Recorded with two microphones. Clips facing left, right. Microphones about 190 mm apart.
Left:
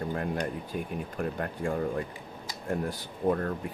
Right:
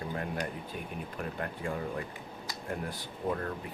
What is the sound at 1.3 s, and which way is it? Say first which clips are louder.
Speech: left 4 dB; 40° left (ahead or behind).